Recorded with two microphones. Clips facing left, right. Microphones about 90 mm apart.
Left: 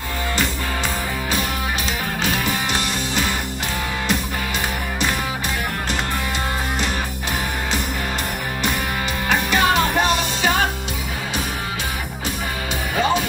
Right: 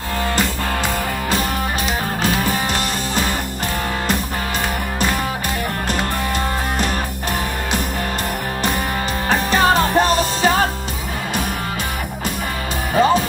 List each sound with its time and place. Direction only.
2.2 s music: 40° right (ahead or behind)
9.3 s music: 35° right (ahead or behind)
12.9 s music: 40° right (ahead or behind)